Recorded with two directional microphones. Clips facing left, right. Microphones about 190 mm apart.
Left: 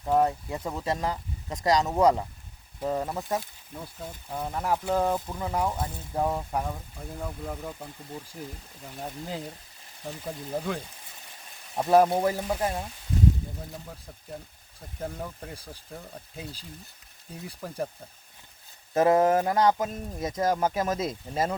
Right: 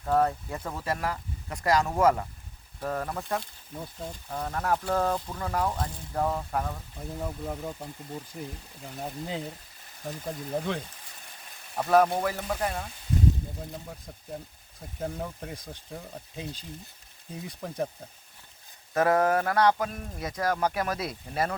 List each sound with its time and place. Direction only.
0.0 s speech: 15° left (ahead or behind)
7.2 s speech: 5° right (ahead or behind)
11.8 s speech: 25° left (ahead or behind)
14.9 s speech: 5° right (ahead or behind)
18.9 s speech: 25° left (ahead or behind)